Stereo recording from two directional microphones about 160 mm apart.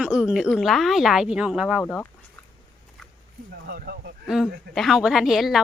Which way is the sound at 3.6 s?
75° right (ahead or behind).